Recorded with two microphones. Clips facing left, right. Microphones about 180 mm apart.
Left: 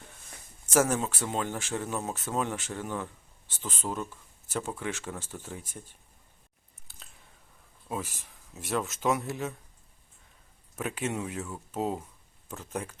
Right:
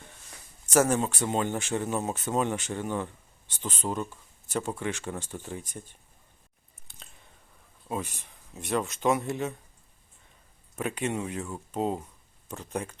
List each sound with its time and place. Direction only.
0.3 s a sound: 5° left (ahead or behind)
1.3 s speech: centre (ahead or behind)
6.9 s chewing: 5° left (ahead or behind)
7.9 s speech: centre (ahead or behind)
10.8 s speech: 5° left (ahead or behind)